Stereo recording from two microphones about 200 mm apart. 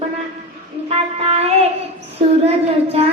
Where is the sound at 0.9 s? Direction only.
30° right (ahead or behind).